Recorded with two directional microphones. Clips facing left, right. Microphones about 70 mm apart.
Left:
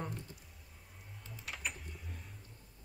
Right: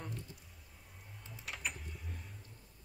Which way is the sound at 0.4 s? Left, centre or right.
Centre.